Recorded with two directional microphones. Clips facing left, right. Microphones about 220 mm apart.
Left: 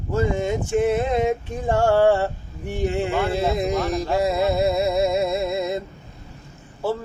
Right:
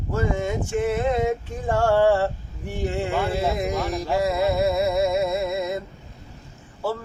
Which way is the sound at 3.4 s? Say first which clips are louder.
Left 2 dB; 20° left (ahead or behind).